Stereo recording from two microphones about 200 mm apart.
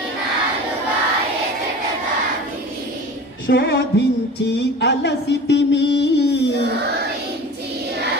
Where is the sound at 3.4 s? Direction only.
50° left (ahead or behind).